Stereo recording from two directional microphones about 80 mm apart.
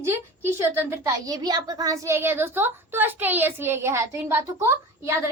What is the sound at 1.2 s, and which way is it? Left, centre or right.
Speech, right.